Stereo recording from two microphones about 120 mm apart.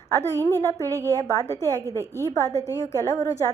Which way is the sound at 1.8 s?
25° right (ahead or behind).